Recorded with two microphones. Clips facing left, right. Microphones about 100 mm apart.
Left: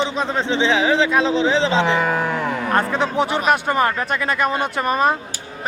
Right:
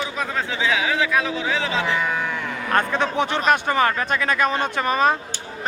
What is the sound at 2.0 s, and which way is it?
Speech, 40° left (ahead or behind).